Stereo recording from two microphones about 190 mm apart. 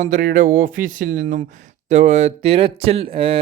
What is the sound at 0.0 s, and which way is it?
Speech, 40° right (ahead or behind).